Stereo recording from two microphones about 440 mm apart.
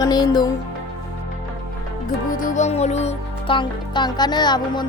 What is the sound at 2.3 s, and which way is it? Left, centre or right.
Speech, centre.